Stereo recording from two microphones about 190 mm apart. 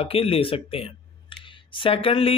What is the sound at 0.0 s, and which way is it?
Speech, 30° left (ahead or behind).